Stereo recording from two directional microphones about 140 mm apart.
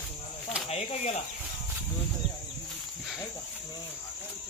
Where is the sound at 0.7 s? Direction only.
50° left (ahead or behind).